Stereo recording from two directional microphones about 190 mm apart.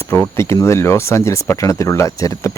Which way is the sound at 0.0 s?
10° left (ahead or behind).